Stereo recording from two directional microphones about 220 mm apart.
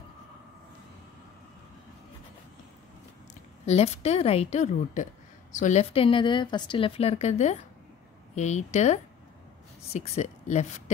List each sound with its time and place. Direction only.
3.6 s a woman's voice: 30° left (ahead or behind)